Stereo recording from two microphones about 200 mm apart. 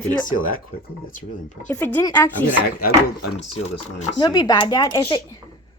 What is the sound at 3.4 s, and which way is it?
Speech, 75° left (ahead or behind).